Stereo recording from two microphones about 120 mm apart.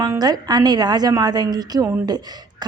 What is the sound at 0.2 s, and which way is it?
A woman's voice, 35° right (ahead or behind).